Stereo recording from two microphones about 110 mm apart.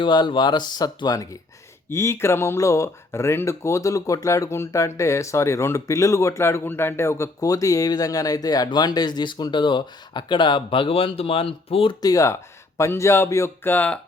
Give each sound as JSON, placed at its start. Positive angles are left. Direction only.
{"t": 0.0, "sound": "speech", "side_deg": 45}
{"t": 12.0, "sound": "speech", "side_deg": 30}